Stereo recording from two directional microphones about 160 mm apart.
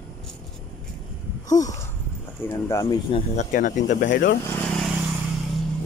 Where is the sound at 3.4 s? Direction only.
50° left (ahead or behind).